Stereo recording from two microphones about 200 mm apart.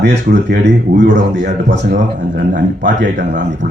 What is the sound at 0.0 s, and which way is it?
Speech, 55° right (ahead or behind).